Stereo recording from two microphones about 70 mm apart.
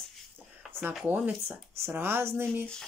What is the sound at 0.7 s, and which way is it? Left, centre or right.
Speech, right.